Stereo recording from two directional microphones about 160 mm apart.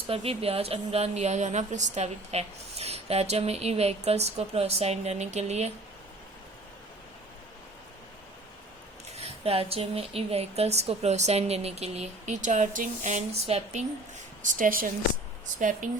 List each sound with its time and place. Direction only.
0.1 s a woman's voice: 40° right (ahead or behind)
9.1 s a woman's voice: 40° right (ahead or behind)
14.4 s speech: 60° right (ahead or behind)